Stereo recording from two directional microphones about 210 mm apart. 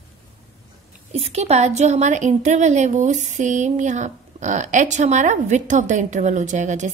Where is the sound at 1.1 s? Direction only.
30° right (ahead or behind).